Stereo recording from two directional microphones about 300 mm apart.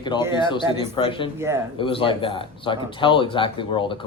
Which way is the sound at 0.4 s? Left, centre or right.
Centre.